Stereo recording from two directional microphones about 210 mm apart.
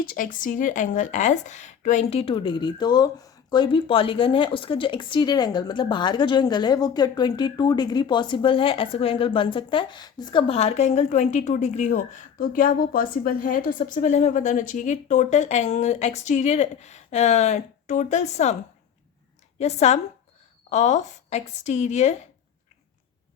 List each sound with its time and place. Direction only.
0.0 s speech: 40° left (ahead or behind)
19.5 s speech: 30° left (ahead or behind)